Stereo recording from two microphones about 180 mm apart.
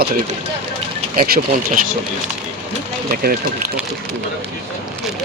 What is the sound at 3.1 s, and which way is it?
Speech, 55° right (ahead or behind).